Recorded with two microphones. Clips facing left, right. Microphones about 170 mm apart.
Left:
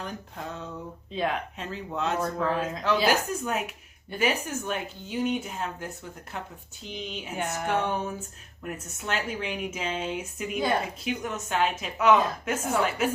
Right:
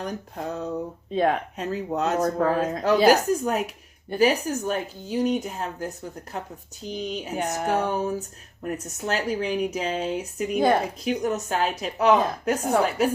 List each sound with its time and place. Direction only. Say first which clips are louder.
0.0 s speech: right 6 dB; 40° right (ahead or behind)